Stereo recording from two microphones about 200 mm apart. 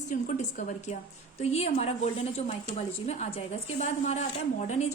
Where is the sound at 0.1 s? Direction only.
40° left (ahead or behind).